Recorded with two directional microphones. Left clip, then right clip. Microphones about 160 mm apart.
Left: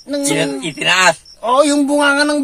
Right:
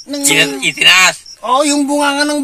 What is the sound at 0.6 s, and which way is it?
Speech, 50° left (ahead or behind).